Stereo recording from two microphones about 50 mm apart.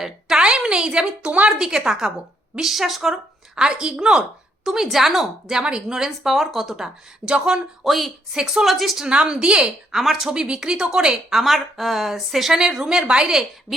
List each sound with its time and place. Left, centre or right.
0.0 s a sound: centre
0.4 s a woman's voice: centre
3.5 s a woman's voice: centre
5.5 s speech: centre
7.9 s a woman's voice: centre
8.3 s speech: centre
8.6 s a woman's voice: centre
9.0 s a woman's voice: centre
9.9 s a woman's voice: centre
10.2 s speech: centre